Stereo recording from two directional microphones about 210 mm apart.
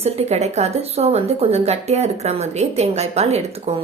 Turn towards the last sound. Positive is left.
turn(degrees=-30)  # may be behind; listen again after turning